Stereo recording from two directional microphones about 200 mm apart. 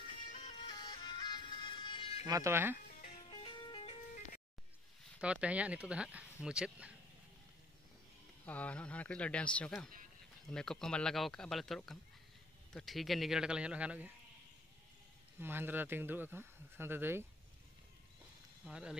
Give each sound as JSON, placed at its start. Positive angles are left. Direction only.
{"t": 0.6, "sound": "music", "side_deg": 20}
{"t": 2.2, "sound": "speech", "side_deg": -15}
{"t": 3.3, "sound": "music", "side_deg": 25}
{"t": 5.2, "sound": "speech", "side_deg": -5}
{"t": 8.5, "sound": "speech", "side_deg": 5}
{"t": 15.4, "sound": "speech", "side_deg": -10}
{"t": 18.7, "sound": "speech", "side_deg": -5}